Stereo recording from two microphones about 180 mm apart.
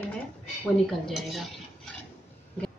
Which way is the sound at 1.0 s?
Centre (ahead or behind).